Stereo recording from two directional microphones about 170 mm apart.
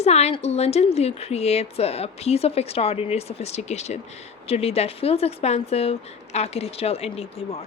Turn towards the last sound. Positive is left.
turn(degrees=35)  # may be behind; listen again after turning